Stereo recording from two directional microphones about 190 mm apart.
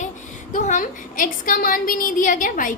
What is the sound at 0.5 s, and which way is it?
A woman's voice, 40° left (ahead or behind).